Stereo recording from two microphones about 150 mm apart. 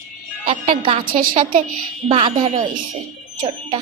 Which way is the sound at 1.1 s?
65° right (ahead or behind).